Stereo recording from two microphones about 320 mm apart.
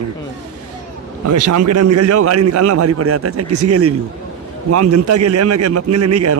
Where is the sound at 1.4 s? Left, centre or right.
Right.